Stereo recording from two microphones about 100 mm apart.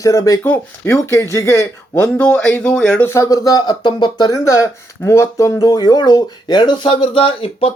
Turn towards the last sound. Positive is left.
turn(degrees=65)  # may be behind; listen again after turning